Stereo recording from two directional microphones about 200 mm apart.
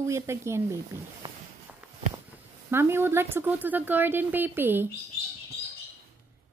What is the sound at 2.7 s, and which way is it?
A woman's voice, 10° right (ahead or behind).